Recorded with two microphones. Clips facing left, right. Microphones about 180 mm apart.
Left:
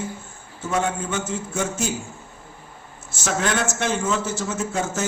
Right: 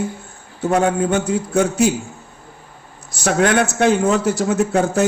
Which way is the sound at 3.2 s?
60° right (ahead or behind).